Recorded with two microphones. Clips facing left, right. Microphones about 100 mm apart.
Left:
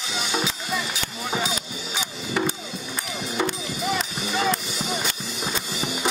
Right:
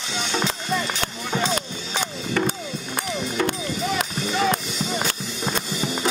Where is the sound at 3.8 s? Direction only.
5° left (ahead or behind).